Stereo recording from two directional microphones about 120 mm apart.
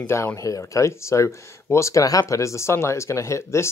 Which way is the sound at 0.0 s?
20° left (ahead or behind).